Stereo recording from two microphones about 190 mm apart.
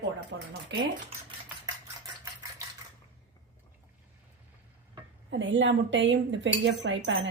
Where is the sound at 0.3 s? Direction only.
70° right (ahead or behind).